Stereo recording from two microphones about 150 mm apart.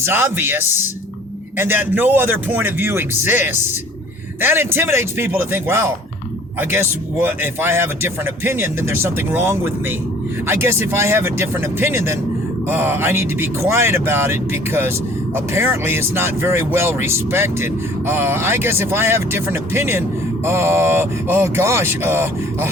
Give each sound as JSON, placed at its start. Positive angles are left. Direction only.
{"t": 0.0, "sound": "speech", "side_deg": -15}